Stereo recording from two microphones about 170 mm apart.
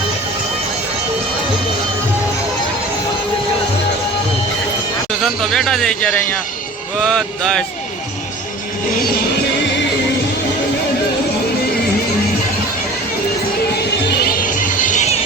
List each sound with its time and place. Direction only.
5.2 s speech: centre (ahead or behind)
14.1 s music: 65° left (ahead or behind); by 15.2 s 45° left (ahead or behind)